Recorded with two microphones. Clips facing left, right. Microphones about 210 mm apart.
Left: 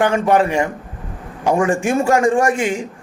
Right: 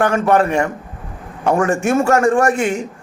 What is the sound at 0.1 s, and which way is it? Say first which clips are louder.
Speech: right 1 dB; 15° left (ahead or behind).